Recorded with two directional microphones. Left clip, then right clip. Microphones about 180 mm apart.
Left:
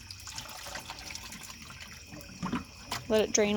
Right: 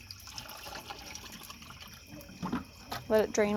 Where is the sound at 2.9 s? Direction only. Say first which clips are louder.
Even; 15° left (ahead or behind).